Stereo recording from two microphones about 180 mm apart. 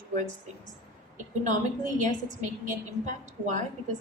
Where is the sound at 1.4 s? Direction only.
45° right (ahead or behind).